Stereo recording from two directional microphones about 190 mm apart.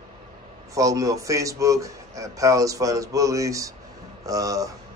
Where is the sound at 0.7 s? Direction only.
15° right (ahead or behind).